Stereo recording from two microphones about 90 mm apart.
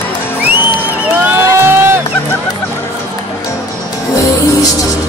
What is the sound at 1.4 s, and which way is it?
Music, 30° right (ahead or behind).